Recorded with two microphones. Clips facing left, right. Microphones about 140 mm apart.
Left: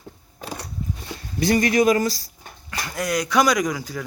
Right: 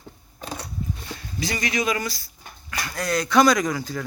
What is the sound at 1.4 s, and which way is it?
Speech, 50° left (ahead or behind).